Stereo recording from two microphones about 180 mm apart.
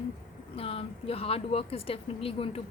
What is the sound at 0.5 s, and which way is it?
A woman's voice, 30° left (ahead or behind).